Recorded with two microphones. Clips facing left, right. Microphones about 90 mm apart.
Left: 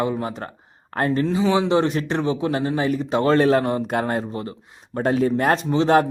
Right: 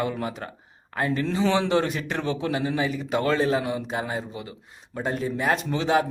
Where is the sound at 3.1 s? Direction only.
25° left (ahead or behind).